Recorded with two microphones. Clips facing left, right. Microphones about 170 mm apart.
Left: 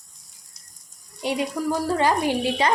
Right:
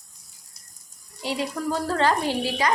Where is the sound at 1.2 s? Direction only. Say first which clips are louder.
Left 3 dB; 20° left (ahead or behind).